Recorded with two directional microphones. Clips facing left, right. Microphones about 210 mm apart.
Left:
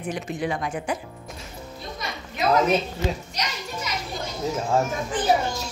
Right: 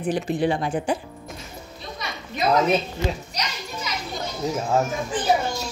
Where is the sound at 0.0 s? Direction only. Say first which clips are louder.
Right 5 dB; 30° right (ahead or behind).